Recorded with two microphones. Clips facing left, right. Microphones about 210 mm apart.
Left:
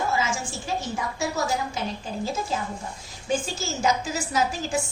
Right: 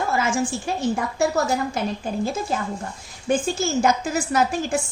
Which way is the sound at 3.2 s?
55° right (ahead or behind).